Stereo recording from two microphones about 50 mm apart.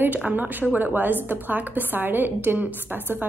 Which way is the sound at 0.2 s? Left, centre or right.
Right.